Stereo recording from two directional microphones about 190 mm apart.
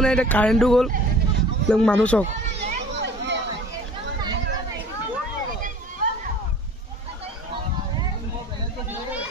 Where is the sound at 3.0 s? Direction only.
70° right (ahead or behind).